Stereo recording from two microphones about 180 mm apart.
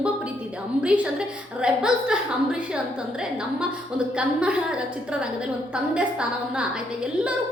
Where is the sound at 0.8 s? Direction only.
5° right (ahead or behind).